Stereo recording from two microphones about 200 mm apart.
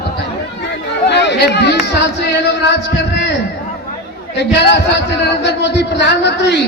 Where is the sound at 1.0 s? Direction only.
60° left (ahead or behind).